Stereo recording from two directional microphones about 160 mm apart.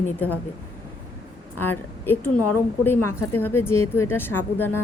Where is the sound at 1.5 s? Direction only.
15° left (ahead or behind).